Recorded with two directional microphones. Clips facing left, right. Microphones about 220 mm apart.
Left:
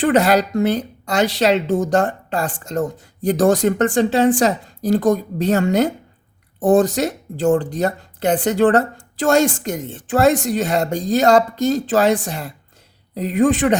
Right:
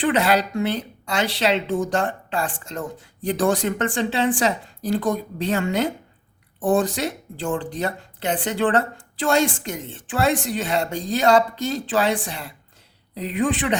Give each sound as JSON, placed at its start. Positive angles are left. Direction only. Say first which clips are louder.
{"t": 0.0, "sound": "speech", "louder": "left 5 dB", "side_deg": 45}